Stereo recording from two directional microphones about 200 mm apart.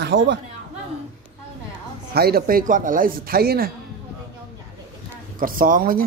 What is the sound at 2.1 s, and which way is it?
Speech, 50° right (ahead or behind).